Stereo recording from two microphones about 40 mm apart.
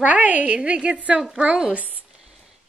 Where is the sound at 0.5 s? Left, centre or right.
Right.